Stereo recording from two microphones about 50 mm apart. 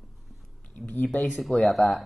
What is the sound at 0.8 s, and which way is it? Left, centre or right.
Speech, left.